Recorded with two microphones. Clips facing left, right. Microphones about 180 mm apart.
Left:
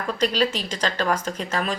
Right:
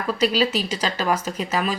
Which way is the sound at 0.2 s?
10° right (ahead or behind).